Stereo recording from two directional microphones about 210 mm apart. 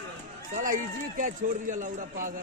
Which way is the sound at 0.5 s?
35° right (ahead or behind).